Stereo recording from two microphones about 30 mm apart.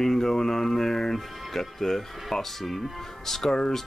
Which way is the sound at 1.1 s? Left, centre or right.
Centre.